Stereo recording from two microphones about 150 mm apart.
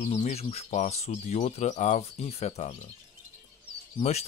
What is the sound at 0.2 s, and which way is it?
Speech, 45° left (ahead or behind).